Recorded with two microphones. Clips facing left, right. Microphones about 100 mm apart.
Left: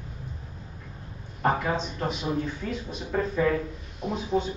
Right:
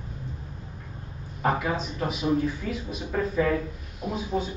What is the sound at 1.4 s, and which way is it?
Speech, 5° right (ahead or behind).